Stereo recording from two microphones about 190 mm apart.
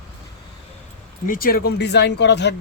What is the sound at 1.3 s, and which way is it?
Speech, 50° left (ahead or behind).